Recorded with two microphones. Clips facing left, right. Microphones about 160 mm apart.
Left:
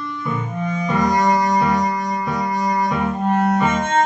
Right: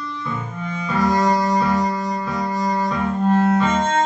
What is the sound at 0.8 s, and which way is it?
Music, 15° left (ahead or behind).